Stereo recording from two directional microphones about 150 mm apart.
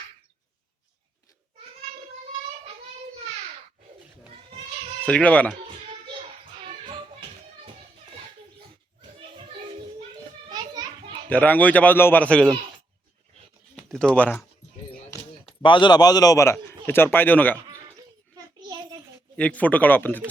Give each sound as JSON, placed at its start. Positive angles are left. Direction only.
{"t": 5.0, "sound": "a man's voice", "side_deg": 10}
{"t": 10.5, "sound": "children playing", "side_deg": -25}
{"t": 11.3, "sound": "a man's voice", "side_deg": 10}
{"t": 13.7, "sound": "speech", "side_deg": 5}
{"t": 15.4, "sound": "a man's voice", "side_deg": 35}
{"t": 18.3, "sound": "a sound", "side_deg": -25}
{"t": 19.4, "sound": "a man's voice", "side_deg": 10}